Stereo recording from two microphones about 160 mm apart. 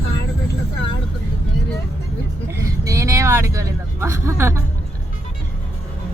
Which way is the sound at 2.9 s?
20° right (ahead or behind).